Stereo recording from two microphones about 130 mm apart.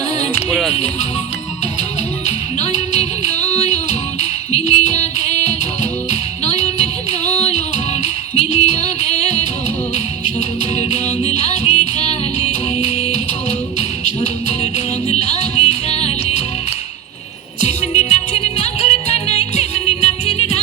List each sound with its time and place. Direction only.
0.3 s music: 5° left (ahead or behind)
2.2 s music: 60° left (ahead or behind)
10.8 s music: 55° left (ahead or behind)
17.6 s music: 60° left (ahead or behind)